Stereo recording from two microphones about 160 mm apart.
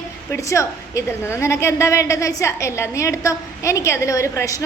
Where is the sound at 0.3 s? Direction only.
20° left (ahead or behind).